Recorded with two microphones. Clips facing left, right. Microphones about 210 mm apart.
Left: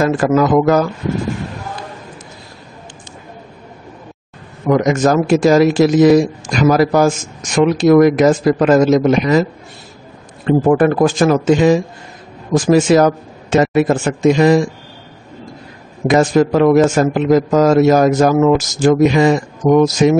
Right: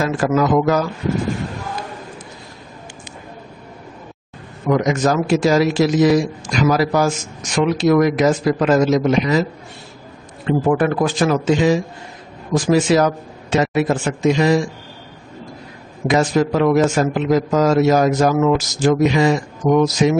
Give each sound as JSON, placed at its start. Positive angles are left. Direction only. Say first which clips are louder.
{"t": 0.0, "sound": "a man's voice", "louder": "left 4 dB", "side_deg": 50}
{"t": 4.6, "sound": "a man's voice", "louder": "left 4 dB", "side_deg": 50}
{"t": 10.4, "sound": "a man's voice", "louder": "left 5 dB", "side_deg": 45}
{"t": 16.1, "sound": "a man's voice", "louder": "left 4 dB", "side_deg": 45}